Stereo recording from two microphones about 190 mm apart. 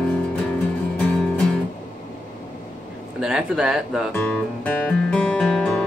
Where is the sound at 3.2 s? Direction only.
5° right (ahead or behind).